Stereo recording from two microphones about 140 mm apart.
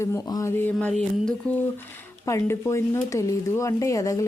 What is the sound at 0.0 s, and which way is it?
A woman's voice, 20° left (ahead or behind).